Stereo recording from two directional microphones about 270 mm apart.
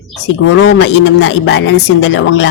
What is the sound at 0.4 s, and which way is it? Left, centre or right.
Speech, left.